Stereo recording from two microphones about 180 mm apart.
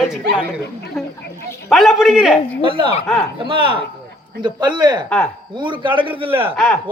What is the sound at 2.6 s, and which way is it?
A man's voice, 30° right (ahead or behind).